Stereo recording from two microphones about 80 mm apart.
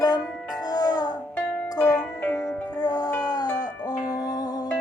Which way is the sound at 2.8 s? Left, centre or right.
Left.